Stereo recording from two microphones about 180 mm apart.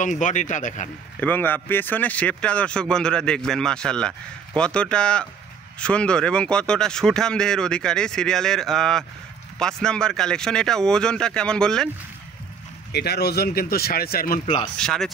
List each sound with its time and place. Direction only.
0.0 s speech: 45° left (ahead or behind)
1.2 s speech: 10° left (ahead or behind)
12.9 s speech: 65° left (ahead or behind)
14.4 s speech: 30° left (ahead or behind)
14.8 s speech: centre (ahead or behind)